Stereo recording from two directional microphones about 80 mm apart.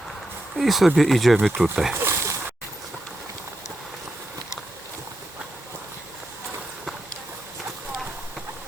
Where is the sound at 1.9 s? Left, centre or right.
Right.